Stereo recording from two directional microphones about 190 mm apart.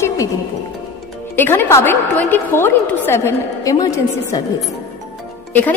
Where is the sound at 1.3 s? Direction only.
10° left (ahead or behind).